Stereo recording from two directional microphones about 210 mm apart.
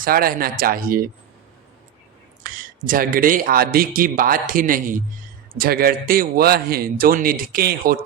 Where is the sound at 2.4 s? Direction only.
40° right (ahead or behind).